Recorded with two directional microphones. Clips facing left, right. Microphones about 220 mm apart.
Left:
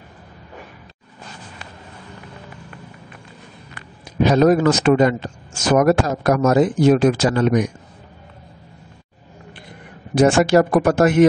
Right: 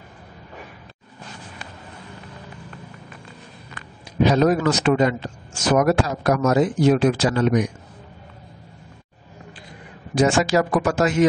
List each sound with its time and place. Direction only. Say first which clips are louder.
4.2 s speech: left 3 dB; 50° left (ahead or behind)
10.1 s speech: left 4 dB; 55° left (ahead or behind)